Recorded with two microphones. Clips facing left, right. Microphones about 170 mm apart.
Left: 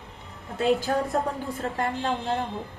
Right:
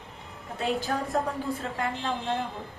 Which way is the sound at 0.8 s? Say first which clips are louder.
Left 3 dB; 40° left (ahead or behind).